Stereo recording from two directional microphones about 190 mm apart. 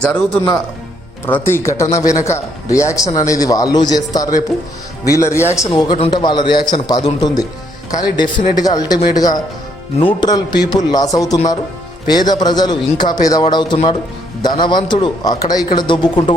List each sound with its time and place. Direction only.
0.0 s a man's voice: 10° left (ahead or behind)